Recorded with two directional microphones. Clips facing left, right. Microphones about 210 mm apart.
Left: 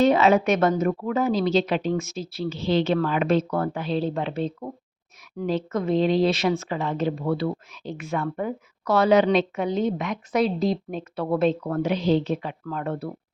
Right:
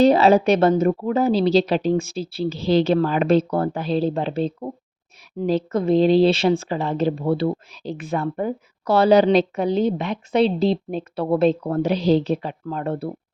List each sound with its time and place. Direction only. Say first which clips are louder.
0.0 s speech: right 4 dB; 35° right (ahead or behind)